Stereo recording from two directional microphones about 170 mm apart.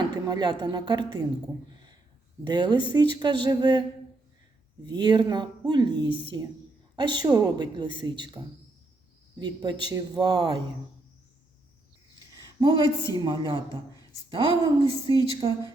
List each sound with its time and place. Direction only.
0.1 s a woman's voice: 25° right (ahead or behind)
2.5 s a woman's voice: 25° right (ahead or behind)
4.9 s a woman's voice: 25° right (ahead or behind)
9.4 s a woman's voice: 25° right (ahead or behind)
12.4 s a sound: 25° right (ahead or behind)
13.1 s a woman's voice: 30° right (ahead or behind)